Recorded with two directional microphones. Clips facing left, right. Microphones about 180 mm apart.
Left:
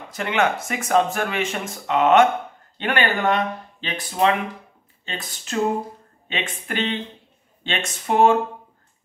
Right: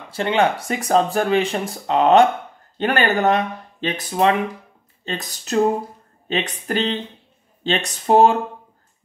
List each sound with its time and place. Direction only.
0.1 s speech: 30° right (ahead or behind)